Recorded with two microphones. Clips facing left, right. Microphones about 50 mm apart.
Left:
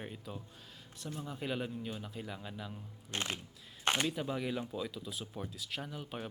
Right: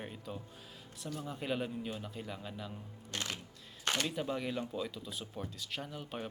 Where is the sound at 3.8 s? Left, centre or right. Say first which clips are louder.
Left 2 dB; left.